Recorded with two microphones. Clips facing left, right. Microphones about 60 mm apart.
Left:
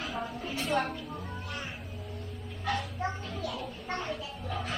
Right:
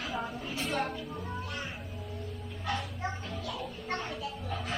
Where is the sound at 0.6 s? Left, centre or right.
Centre.